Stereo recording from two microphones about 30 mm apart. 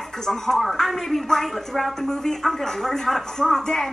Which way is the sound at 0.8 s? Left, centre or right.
Centre.